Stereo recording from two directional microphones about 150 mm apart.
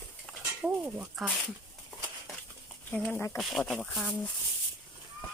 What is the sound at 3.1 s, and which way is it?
Speech, 20° left (ahead or behind).